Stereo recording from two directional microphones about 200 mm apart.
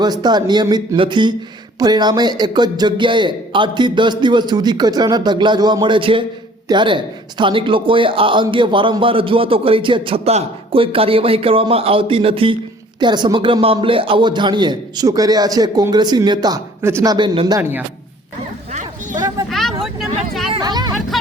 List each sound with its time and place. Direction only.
0.0 s speech: 20° right (ahead or behind)
18.7 s a sound: 40° right (ahead or behind)
19.5 s vehicle: centre (ahead or behind)
20.5 s music: 20° right (ahead or behind)